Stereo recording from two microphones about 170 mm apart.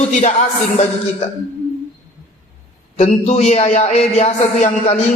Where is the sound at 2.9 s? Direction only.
40° left (ahead or behind).